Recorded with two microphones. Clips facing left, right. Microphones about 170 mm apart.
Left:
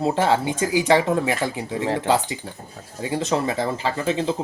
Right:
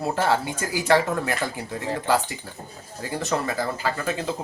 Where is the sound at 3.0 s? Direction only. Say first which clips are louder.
Left 4 dB; 20° left (ahead or behind).